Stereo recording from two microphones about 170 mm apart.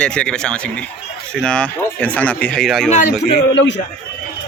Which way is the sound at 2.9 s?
45° left (ahead or behind).